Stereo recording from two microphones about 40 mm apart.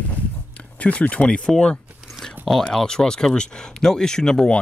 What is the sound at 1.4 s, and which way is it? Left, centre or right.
Speech, left.